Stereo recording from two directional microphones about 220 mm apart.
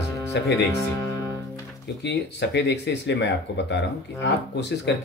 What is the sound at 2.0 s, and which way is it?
Speech, 50° left (ahead or behind).